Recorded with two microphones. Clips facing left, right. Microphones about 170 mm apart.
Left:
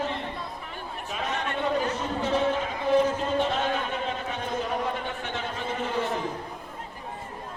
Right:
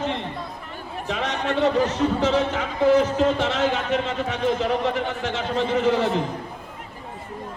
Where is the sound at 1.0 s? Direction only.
80° right.